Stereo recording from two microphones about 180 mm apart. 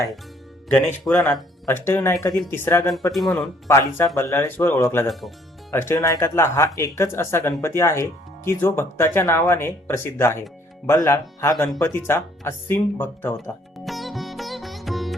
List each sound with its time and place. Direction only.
1.0 s a man's voice: 5° left (ahead or behind)
3.1 s a man's voice: centre (ahead or behind)
3.7 s speech: 15° left (ahead or behind)
5.0 s a man's voice: centre (ahead or behind)
5.7 s speech: 15° left (ahead or behind)
13.7 s sitar: centre (ahead or behind)